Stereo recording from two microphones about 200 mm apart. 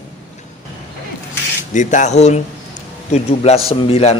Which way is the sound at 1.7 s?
40° left (ahead or behind).